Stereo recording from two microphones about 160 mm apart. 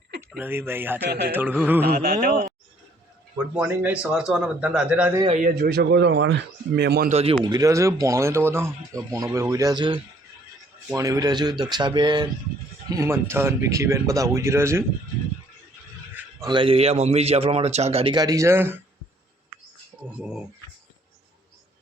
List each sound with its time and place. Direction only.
0.2 s speech: 15° right (ahead or behind)
1.0 s speech: 90° right
1.3 s speech: 10° right (ahead or behind)
1.9 s speech: 70° right (ahead or behind)
3.3 s speech: 10° right (ahead or behind)
5.3 s speech: 55° right (ahead or behind); by 7.1 s 85° right
7.1 s a man's voice: 40° right (ahead or behind)
7.4 s speech: 20° right (ahead or behind)
16.5 s a man's voice: 35° right (ahead or behind); by 18.8 s 15° right (ahead or behind)
20.1 s speech: 5° right (ahead or behind)